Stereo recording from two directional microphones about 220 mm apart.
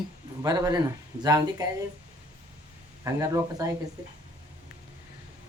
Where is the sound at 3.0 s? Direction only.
15° right (ahead or behind).